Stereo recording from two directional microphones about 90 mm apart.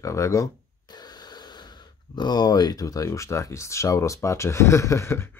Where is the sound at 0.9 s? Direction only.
50° left (ahead or behind).